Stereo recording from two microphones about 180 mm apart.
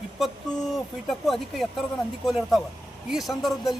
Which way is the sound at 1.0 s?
Centre (ahead or behind).